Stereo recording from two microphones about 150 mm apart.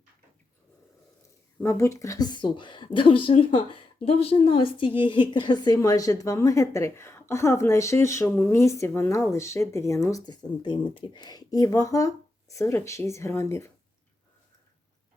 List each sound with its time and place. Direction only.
1.6 s a woman's voice: 20° left (ahead or behind)